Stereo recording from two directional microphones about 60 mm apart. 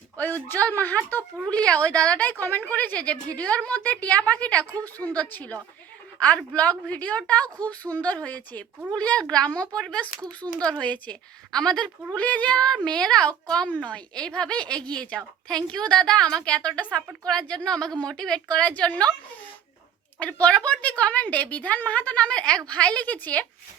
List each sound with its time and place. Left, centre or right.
0.2 s a woman's voice: left
1.5 s a woman's voice: left
2.4 s a woman's voice: left; by 10.1 s centre
10.2 s a child's voice: right
10.6 s a woman's voice: centre
11.5 s a woman's voice: centre
12.1 s a woman's voice: left
20.1 s a woman's voice: left